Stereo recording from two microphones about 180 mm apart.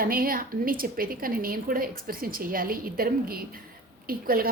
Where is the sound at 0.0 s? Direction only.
55° right (ahead or behind).